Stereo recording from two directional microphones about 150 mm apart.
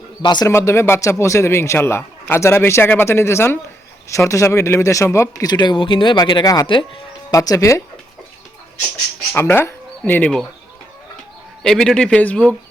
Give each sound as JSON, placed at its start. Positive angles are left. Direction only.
{"t": 0.2, "sound": "speech", "side_deg": 30}
{"t": 9.3, "sound": "speech", "side_deg": 15}
{"t": 11.6, "sound": "speech", "side_deg": 5}